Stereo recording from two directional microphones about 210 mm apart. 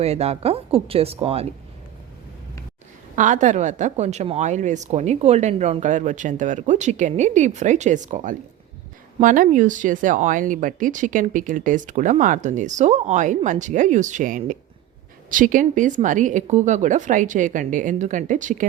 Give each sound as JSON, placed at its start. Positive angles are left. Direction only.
{"t": 0.0, "sound": "speech", "side_deg": -30}
{"t": 3.2, "sound": "speech", "side_deg": -35}